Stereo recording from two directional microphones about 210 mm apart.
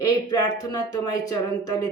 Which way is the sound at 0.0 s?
20° left (ahead or behind).